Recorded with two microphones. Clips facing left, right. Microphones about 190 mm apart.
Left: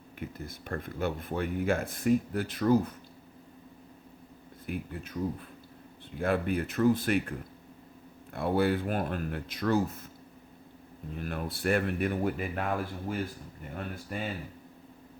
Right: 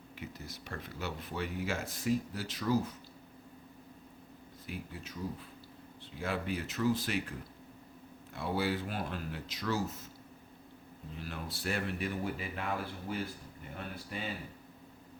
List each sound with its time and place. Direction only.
0.2 s speech: 55° left (ahead or behind)
4.6 s speech: 55° left (ahead or behind)
11.1 s speech: 55° left (ahead or behind)